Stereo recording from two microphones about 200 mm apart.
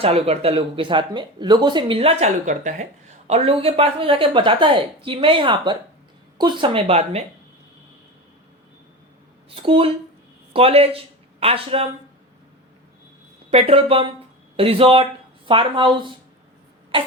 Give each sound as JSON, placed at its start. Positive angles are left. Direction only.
{"t": 0.0, "sound": "speech", "side_deg": -30}
{"t": 9.6, "sound": "speech", "side_deg": -25}
{"t": 13.5, "sound": "speech", "side_deg": -30}